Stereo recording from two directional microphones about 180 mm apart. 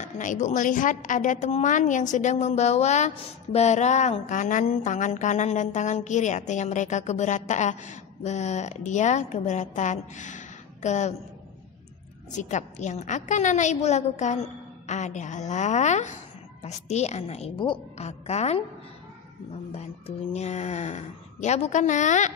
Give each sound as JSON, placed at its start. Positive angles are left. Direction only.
{"t": 0.0, "sound": "a woman's voice", "side_deg": 45}
{"t": 12.3, "sound": "speech", "side_deg": 40}
{"t": 19.7, "sound": "speech", "side_deg": 35}